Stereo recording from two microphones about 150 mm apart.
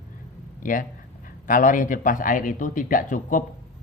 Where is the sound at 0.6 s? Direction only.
65° left (ahead or behind).